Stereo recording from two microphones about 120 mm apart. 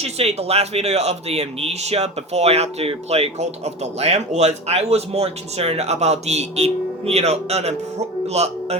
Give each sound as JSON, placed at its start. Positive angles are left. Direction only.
{"t": 0.0, "sound": "speech", "side_deg": -60}